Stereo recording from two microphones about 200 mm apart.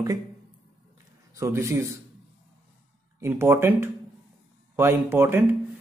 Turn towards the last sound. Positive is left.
turn(degrees=-10)  # may be behind; listen again after turning